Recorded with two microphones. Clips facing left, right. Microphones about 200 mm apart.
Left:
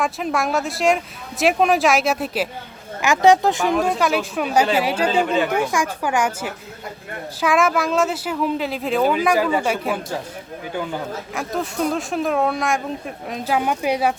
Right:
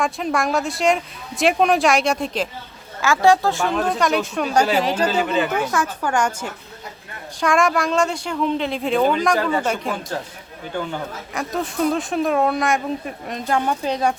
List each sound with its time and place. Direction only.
0.0 s speech: centre (ahead or behind)
3.0 s speech: 20° left (ahead or behind)
3.8 s speech: 5° left (ahead or behind)
5.0 s speech: 5° right (ahead or behind)
5.5 s speech: 10° left (ahead or behind)
11.3 s speech: centre (ahead or behind)